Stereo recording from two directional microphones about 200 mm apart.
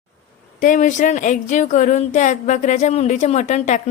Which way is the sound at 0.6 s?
40° left (ahead or behind).